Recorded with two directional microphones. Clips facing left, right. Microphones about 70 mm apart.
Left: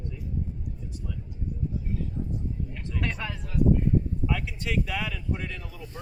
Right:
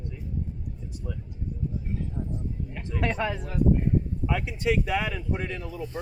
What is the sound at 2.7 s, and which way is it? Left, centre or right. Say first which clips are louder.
Speech: right 7 dB; right.